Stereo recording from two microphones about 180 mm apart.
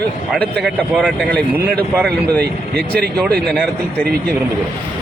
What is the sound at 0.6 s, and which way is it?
Speech, 5° left (ahead or behind).